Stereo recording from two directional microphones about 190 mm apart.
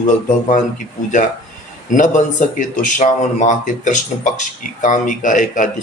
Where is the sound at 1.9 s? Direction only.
40° left (ahead or behind).